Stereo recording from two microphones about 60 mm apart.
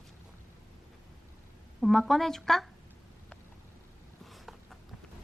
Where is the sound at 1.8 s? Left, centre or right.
Centre.